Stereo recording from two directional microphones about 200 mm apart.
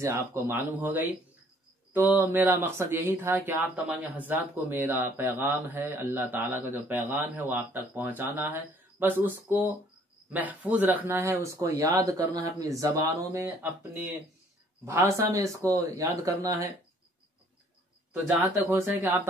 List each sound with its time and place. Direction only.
0.0 s speech: 10° right (ahead or behind)
14.9 s speech: 15° right (ahead or behind)
18.7 s speech: 15° right (ahead or behind)